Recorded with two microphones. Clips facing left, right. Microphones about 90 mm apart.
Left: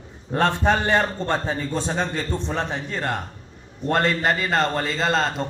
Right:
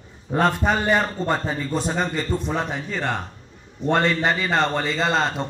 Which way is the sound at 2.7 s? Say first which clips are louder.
Even; centre (ahead or behind).